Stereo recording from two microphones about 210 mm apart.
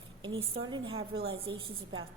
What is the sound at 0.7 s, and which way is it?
A woman's voice, 25° right (ahead or behind).